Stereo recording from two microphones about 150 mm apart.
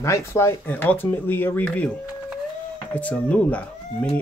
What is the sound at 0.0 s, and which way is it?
Speech, 20° left (ahead or behind).